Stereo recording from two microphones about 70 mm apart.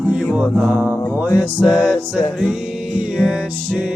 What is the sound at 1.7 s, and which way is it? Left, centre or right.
Music, centre.